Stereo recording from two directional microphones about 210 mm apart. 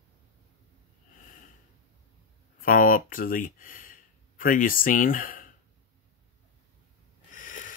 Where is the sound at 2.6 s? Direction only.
40° left (ahead or behind).